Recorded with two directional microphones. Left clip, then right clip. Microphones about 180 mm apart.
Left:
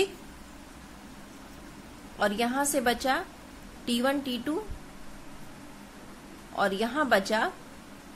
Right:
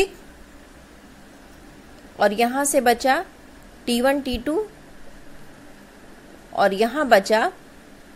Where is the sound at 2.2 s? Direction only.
30° right (ahead or behind).